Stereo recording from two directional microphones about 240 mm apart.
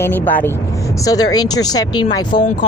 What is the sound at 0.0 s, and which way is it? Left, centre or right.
Speech, centre.